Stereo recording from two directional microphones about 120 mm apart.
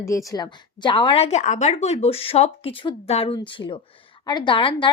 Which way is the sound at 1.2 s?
80° left.